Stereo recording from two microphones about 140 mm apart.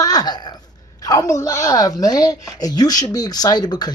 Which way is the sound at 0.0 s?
25° left (ahead or behind).